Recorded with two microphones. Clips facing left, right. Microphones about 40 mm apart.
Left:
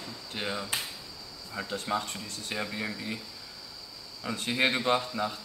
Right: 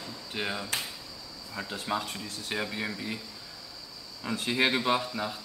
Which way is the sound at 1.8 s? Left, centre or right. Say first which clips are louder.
Right 1 dB; centre.